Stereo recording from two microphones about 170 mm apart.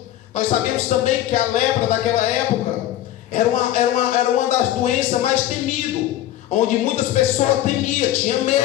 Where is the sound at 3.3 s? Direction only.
45° left (ahead or behind).